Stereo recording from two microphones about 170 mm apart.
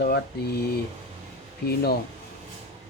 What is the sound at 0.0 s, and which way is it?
Speech, 70° left (ahead or behind).